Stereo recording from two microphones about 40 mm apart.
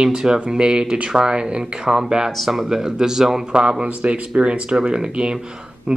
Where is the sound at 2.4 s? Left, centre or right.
Centre.